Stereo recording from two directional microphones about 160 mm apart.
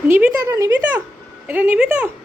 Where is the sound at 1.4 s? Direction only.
10° right (ahead or behind).